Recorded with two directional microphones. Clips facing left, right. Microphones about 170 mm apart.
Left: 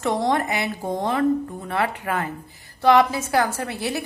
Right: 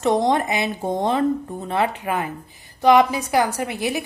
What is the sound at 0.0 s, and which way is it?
A woman's voice, 20° right (ahead or behind).